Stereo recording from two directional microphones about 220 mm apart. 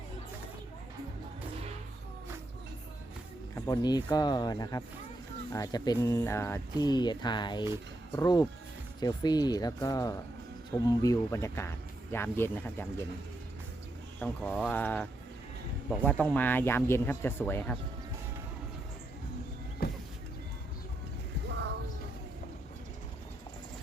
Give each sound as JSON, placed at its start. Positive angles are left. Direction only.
{"t": 3.5, "sound": "speech", "side_deg": 15}
{"t": 14.2, "sound": "speech", "side_deg": 5}
{"t": 19.8, "sound": "vehicle", "side_deg": 45}